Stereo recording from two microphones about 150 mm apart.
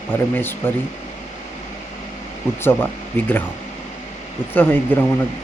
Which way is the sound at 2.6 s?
15° left (ahead or behind).